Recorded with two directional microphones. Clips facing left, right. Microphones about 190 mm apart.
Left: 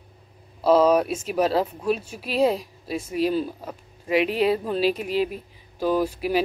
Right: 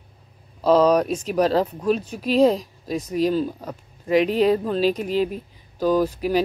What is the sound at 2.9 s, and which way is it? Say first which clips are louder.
Speech: right 2 dB; 40° right (ahead or behind).